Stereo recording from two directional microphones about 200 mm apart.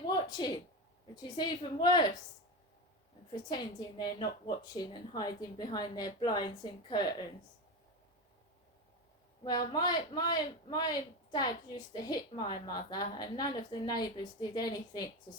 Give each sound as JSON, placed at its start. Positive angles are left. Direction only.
{"t": 0.1, "sound": "a sound", "side_deg": 20}
{"t": 1.1, "sound": "a woman's voice", "side_deg": 20}
{"t": 3.5, "sound": "a woman's voice", "side_deg": 20}
{"t": 9.4, "sound": "a woman's voice", "side_deg": 20}